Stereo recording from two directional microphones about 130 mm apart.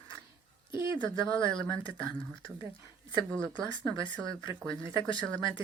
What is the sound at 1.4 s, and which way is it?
A woman's voice, 35° left (ahead or behind).